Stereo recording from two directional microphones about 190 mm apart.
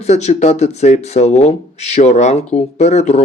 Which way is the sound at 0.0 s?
35° left (ahead or behind).